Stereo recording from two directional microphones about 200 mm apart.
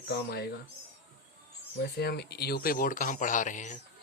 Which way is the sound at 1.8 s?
55° left (ahead or behind).